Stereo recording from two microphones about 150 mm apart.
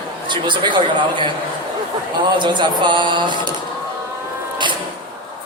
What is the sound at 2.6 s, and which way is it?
Speech, 30° right (ahead or behind).